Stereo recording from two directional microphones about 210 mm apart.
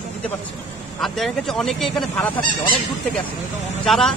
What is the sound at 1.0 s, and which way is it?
Speech, centre (ahead or behind).